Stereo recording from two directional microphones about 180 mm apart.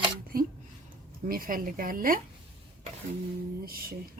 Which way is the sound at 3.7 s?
55° right (ahead or behind).